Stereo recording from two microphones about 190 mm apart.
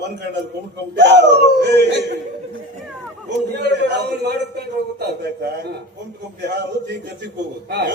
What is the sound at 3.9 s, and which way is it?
Speech, 65° right (ahead or behind).